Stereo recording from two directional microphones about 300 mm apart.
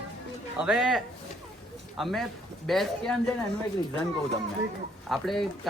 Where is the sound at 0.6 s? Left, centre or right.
Centre.